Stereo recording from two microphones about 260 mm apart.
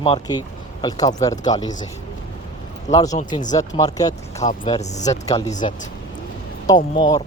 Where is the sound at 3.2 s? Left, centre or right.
Left.